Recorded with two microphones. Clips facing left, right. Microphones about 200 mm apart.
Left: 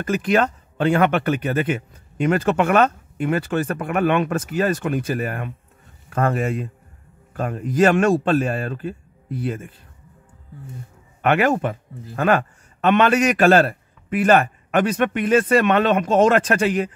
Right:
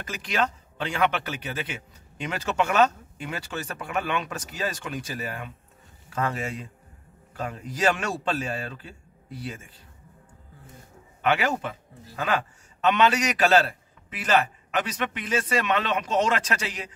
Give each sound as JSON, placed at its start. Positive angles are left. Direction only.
{"t": 0.0, "sound": "speech", "side_deg": 55}
{"t": 11.2, "sound": "speech", "side_deg": 55}